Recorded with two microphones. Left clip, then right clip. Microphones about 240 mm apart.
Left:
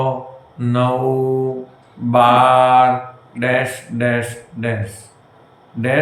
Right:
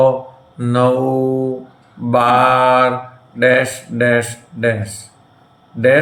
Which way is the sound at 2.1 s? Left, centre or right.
Right.